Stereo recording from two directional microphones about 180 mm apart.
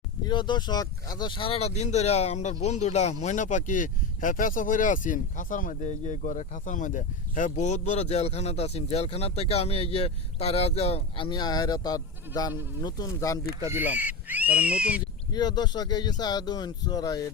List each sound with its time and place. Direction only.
0.3 s speech: 25° left (ahead or behind)
13.7 s speech: 10° right (ahead or behind)
15.3 s speech: 20° left (ahead or behind)